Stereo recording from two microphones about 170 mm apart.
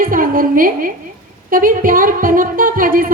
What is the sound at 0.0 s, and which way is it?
A woman's voice, 55° right (ahead or behind).